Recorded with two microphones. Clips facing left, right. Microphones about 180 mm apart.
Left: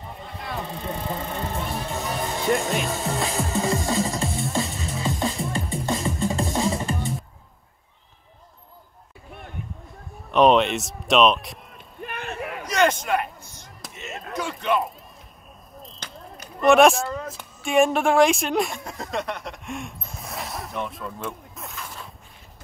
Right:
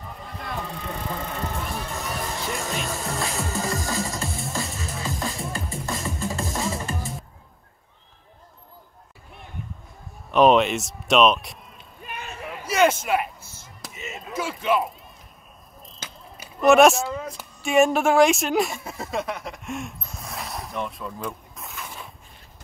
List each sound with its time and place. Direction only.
0.0 s vehicle: 25° left (ahead or behind)
0.3 s vehicle: centre (ahead or behind)
0.9 s music: centre (ahead or behind)
10.3 s speech: centre (ahead or behind)
12.0 s a sound: 60° left (ahead or behind)
12.4 s a sound: centre (ahead or behind)